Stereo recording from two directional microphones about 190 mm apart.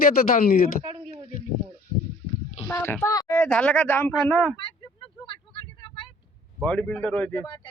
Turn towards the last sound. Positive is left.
turn(degrees=10)  # may be behind; listen again after turning